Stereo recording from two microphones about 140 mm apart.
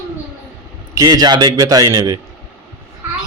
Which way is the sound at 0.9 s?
25° right (ahead or behind).